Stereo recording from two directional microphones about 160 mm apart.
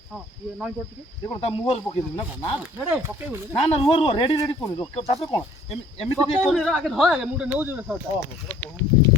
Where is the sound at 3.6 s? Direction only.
35° left (ahead or behind).